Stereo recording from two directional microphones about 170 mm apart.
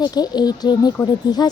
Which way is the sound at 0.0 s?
25° left (ahead or behind).